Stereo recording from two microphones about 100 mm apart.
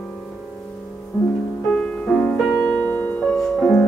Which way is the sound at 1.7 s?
10° left (ahead or behind).